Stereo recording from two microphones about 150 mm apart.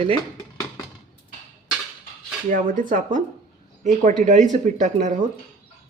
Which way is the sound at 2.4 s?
60° right (ahead or behind).